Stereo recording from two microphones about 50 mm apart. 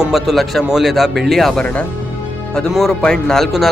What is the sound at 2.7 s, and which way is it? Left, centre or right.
Speech, centre.